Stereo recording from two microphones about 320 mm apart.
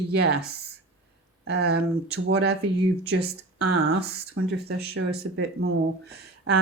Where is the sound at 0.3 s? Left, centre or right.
Right.